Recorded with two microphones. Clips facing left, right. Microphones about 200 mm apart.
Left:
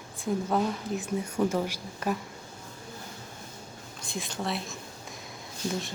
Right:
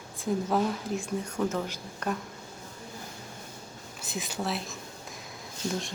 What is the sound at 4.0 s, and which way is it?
Speech, 5° right (ahead or behind).